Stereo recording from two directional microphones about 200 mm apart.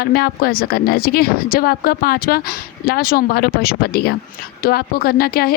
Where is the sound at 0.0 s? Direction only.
50° left (ahead or behind).